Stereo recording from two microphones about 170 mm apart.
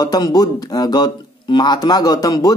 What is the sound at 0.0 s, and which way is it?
Speech, 25° left (ahead or behind).